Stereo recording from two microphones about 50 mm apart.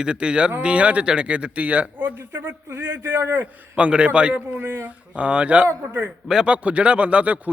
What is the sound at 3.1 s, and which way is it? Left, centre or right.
Speech, right.